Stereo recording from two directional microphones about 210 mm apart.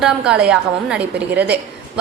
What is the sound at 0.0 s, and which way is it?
A woman's voice, 5° right (ahead or behind).